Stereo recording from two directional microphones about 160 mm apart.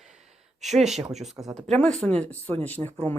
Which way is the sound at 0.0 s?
5° right (ahead or behind).